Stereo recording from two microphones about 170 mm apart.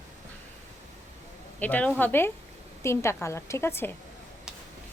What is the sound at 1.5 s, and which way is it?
Speech, 10° left (ahead or behind).